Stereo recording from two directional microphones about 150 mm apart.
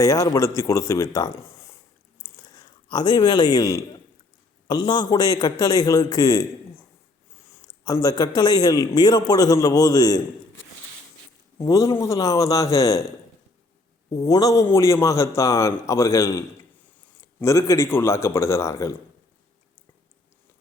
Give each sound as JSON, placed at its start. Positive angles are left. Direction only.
{"t": 0.0, "sound": "a man's voice", "side_deg": 25}
{"t": 7.9, "sound": "a man's voice", "side_deg": 25}
{"t": 11.6, "sound": "a man's voice", "side_deg": 20}
{"t": 17.4, "sound": "a man's voice", "side_deg": 20}